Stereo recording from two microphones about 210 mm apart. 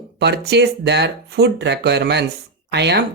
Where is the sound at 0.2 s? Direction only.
55° right (ahead or behind).